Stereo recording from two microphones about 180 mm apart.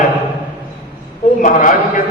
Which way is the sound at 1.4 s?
45° left (ahead or behind).